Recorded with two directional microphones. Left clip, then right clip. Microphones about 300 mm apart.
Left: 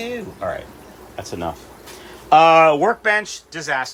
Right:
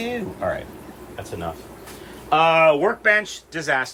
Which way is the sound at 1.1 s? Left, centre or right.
Centre.